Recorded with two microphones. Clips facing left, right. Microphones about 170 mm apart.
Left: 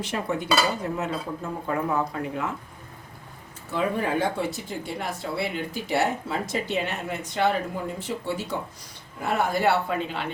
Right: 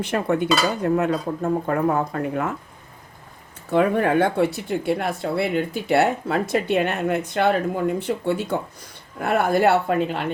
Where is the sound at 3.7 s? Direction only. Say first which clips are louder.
Right 7 dB; 60° right (ahead or behind).